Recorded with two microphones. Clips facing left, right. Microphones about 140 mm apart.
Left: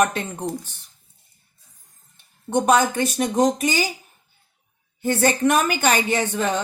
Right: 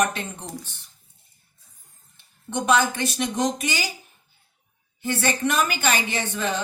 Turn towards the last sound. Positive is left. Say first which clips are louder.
# left 5 dB
turn(degrees=40)  # may be behind; listen again after turning